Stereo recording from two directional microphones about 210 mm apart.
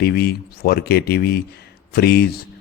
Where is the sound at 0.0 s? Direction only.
50° left (ahead or behind).